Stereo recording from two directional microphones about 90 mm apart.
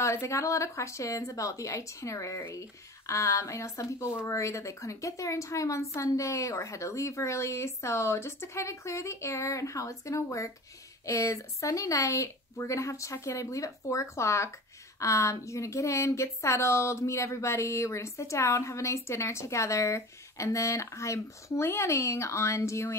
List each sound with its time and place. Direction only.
0.0 s speech: 35° left (ahead or behind)